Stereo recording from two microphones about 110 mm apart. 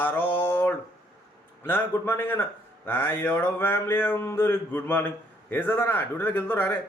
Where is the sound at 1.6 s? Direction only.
20° left (ahead or behind).